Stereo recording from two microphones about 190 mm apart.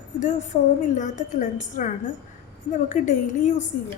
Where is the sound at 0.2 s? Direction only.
40° left (ahead or behind).